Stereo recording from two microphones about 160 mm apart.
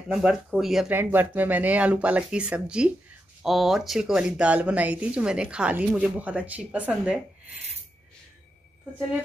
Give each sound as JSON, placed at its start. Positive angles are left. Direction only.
{"t": 0.1, "sound": "speech", "side_deg": -5}